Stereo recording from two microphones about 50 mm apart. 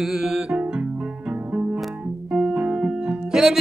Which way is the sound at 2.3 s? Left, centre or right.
Centre.